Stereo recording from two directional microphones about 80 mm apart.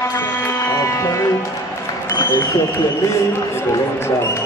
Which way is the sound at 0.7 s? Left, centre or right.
Left.